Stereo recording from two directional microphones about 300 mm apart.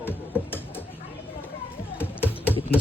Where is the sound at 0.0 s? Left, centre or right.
Centre.